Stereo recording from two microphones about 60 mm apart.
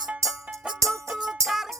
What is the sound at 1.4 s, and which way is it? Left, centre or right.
Music, right.